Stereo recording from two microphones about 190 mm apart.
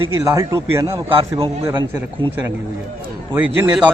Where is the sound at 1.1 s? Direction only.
30° right (ahead or behind).